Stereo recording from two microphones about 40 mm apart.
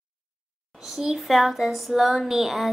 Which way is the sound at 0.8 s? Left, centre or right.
Centre.